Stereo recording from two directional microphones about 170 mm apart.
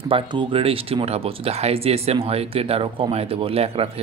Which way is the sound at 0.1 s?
30° right (ahead or behind).